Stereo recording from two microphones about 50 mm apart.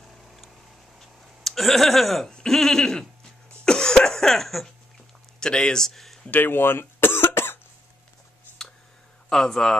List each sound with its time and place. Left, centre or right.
0.0 s vehicle: centre
0.9 s a sound: centre
2.4 s speech: centre
3.6 s cough: centre
5.4 s speech: centre
6.3 s cough: left
9.3 s speech: centre